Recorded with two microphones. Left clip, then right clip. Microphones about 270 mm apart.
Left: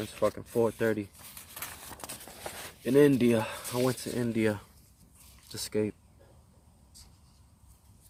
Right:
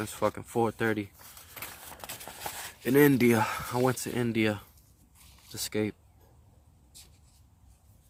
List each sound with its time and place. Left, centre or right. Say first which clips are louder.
0.0 s speech: even; right
2.8 s speech: even; right